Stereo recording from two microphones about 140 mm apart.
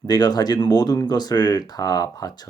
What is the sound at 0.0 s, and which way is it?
Speech, 30° left (ahead or behind).